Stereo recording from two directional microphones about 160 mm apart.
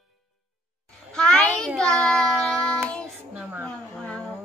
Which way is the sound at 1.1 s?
5° left (ahead or behind).